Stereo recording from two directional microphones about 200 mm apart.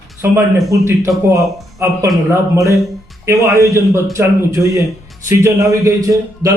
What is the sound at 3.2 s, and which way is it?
Speech, 15° right (ahead or behind).